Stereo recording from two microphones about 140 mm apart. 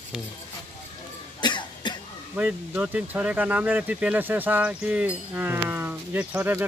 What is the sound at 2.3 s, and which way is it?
Speech, 10° right (ahead or behind).